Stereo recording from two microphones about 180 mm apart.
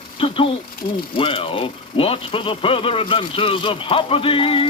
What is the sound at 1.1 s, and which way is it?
Speech, 30° left (ahead or behind).